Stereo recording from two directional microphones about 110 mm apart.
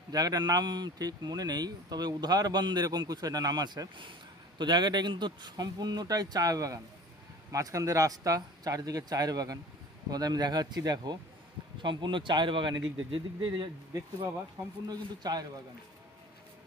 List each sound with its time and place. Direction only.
0.1 s speech: 35° right (ahead or behind)
14.9 s speech: 35° right (ahead or behind)